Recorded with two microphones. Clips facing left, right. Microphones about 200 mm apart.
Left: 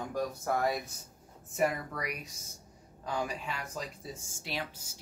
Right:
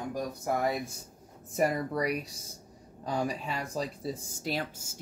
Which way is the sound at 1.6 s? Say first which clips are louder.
Right 3 dB; 35° right (ahead or behind).